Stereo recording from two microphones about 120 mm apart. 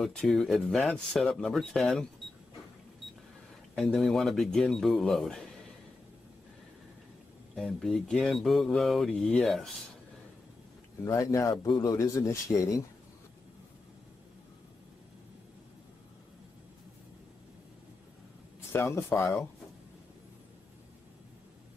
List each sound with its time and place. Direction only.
0.0 s speech: 5° left (ahead or behind)
3.7 s speech: centre (ahead or behind)
7.5 s speech: 5° left (ahead or behind)
11.1 s speech: 25° left (ahead or behind)
18.7 s speech: 20° left (ahead or behind)